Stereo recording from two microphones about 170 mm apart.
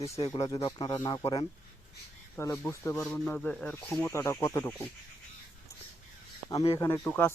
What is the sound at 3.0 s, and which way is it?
Speech, 5° left (ahead or behind).